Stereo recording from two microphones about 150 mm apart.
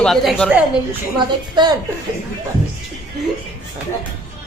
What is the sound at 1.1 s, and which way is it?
Speech, 30° right (ahead or behind).